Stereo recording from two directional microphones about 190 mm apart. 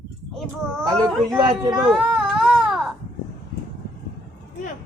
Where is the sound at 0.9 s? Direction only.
20° right (ahead or behind).